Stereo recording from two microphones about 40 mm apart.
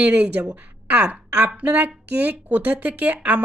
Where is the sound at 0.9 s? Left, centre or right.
Right.